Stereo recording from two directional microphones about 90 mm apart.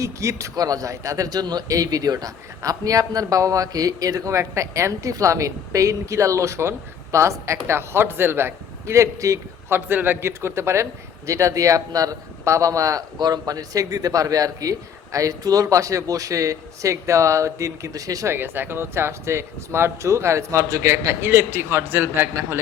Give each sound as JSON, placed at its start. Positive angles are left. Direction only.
{"t": 0.0, "sound": "a man's voice", "side_deg": -35}
{"t": 13.1, "sound": "a man's voice", "side_deg": -50}
{"t": 18.3, "sound": "speech", "side_deg": -20}